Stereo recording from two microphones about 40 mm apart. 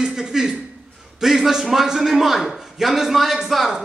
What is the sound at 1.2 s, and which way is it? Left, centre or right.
A man's voice, centre.